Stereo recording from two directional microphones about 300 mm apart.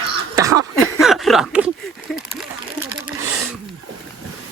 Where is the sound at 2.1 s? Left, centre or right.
Centre.